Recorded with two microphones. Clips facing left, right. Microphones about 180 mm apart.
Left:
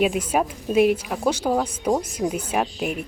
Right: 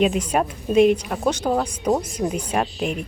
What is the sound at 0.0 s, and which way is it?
A woman's voice, 5° left (ahead or behind).